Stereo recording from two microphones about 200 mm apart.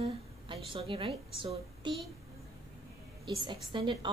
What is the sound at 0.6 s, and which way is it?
A woman's voice, 25° right (ahead or behind).